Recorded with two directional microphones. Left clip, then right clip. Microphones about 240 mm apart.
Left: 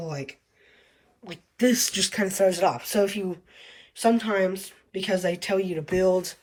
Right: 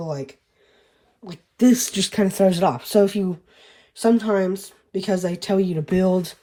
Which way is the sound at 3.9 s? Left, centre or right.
Centre.